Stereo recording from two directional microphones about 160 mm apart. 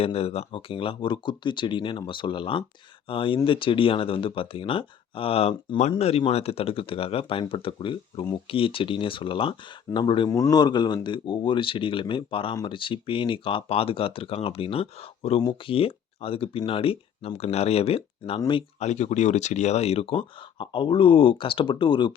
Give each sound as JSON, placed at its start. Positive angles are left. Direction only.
{"t": 0.0, "sound": "speech", "side_deg": 35}
{"t": 18.8, "sound": "speech", "side_deg": 45}